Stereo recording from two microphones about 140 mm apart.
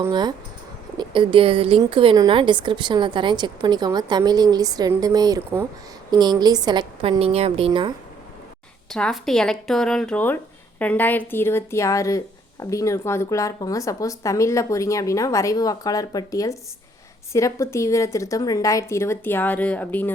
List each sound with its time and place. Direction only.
0.1 s a woman's voice: 30° right (ahead or behind)
8.9 s speech: 5° left (ahead or behind)